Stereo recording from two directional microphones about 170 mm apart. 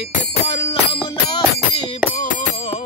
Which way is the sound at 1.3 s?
30° left (ahead or behind).